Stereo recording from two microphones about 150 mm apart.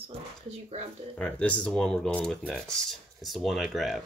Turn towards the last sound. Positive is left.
turn(degrees=0)  # may be behind; listen again after turning